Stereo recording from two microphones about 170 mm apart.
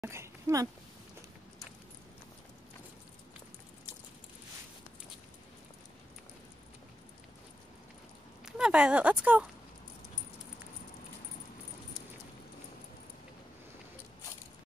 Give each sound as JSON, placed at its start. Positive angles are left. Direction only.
{"t": 0.0, "sound": "speech", "side_deg": -15}
{"t": 8.5, "sound": "speech", "side_deg": -5}